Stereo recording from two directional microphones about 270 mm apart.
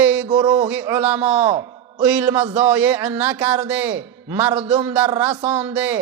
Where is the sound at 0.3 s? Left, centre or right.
Centre.